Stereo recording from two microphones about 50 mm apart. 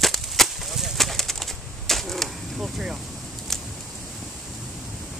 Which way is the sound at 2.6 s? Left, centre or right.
Centre.